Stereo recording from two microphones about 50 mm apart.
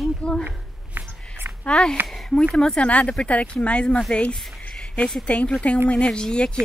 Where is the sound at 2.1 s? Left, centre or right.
Centre.